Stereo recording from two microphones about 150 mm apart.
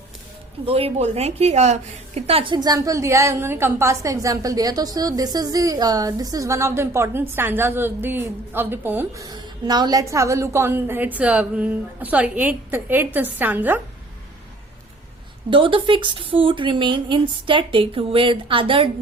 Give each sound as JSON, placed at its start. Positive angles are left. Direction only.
{"t": 0.6, "sound": "a woman's voice", "side_deg": -40}
{"t": 15.4, "sound": "speech", "side_deg": -35}